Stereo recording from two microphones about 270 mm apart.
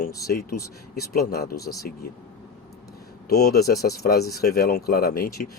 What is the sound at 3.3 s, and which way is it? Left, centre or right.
Speech, left.